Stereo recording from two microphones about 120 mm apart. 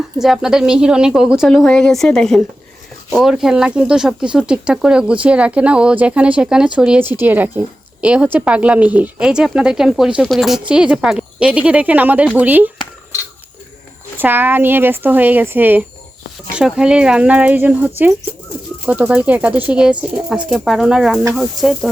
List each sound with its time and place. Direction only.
0.2 s a woman's voice: 5° right (ahead or behind)
14.2 s a woman's voice: 15° right (ahead or behind)